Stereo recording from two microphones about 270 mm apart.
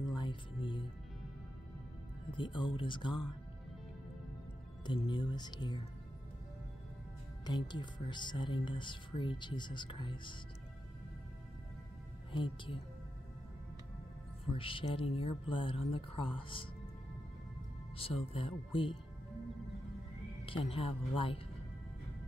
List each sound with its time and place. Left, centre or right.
0.0 s music: centre
2.3 s speech: centre
4.8 s speech: centre
7.4 s speech: centre
12.3 s speech: centre
14.5 s speech: centre
17.9 s speech: left
20.4 s speech: centre